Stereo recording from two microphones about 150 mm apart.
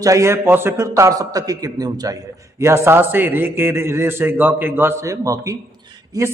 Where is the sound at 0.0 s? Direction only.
20° right (ahead or behind).